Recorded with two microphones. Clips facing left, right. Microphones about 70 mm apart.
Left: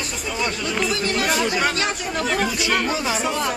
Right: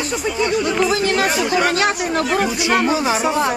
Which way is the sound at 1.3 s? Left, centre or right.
Centre.